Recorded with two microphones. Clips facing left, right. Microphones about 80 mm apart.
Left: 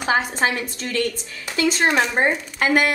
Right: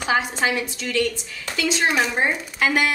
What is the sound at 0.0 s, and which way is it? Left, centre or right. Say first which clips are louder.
A woman's voice: left 1 dB; left.